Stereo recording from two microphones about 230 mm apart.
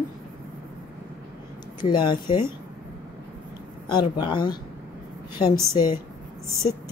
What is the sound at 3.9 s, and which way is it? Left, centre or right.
Speech, centre.